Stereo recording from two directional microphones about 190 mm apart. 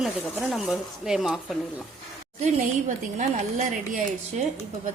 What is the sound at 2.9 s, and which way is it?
Speech, 40° right (ahead or behind).